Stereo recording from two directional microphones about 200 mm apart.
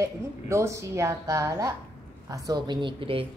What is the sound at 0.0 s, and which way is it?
A woman's voice, 15° right (ahead or behind).